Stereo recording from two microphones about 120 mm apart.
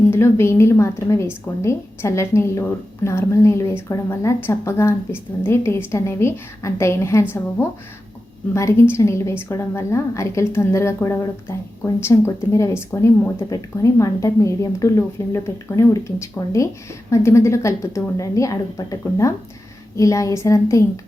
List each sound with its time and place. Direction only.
0.1 s a woman's voice: 20° left (ahead or behind)
8.5 s a woman's voice: 25° left (ahead or behind)